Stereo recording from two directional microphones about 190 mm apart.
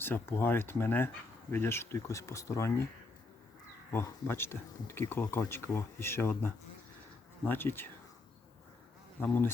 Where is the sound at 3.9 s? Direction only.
10° left (ahead or behind).